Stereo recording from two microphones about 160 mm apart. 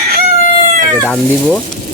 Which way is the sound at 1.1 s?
5° left (ahead or behind).